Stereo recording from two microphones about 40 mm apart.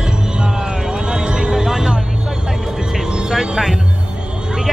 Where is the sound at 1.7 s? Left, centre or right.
Centre.